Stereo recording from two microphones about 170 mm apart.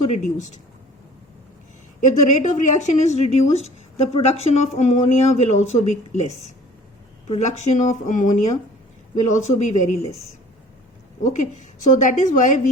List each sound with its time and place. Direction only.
0.0 s speech: 40° left (ahead or behind)
2.0 s speech: 45° left (ahead or behind)
7.3 s speech: 40° left (ahead or behind)
11.2 s speech: 45° left (ahead or behind)